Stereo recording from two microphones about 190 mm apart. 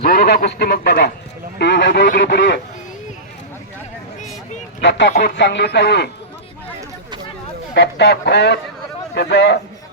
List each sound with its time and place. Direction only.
0.0 s a man's voice: 55° left (ahead or behind)
4.8 s a sound: 65° left (ahead or behind)
5.2 s a man's voice: 65° left (ahead or behind)
7.7 s a man's voice: 60° left (ahead or behind)